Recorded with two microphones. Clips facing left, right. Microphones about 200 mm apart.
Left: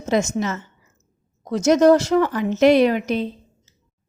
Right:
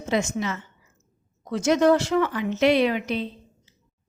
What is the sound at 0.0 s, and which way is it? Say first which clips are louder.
A woman's voice: left 4 dB; 45° left (ahead or behind).